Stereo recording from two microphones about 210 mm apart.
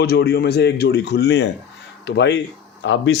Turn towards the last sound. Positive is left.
turn(degrees=60)  # may be behind; listen again after turning